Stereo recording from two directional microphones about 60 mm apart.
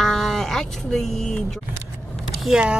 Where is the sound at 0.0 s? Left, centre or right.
Centre.